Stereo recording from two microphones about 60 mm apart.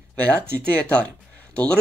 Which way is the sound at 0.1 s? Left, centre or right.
Left.